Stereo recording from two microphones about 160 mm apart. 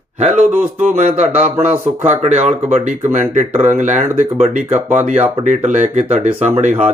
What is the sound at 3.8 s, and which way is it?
Speech, 50° right (ahead or behind).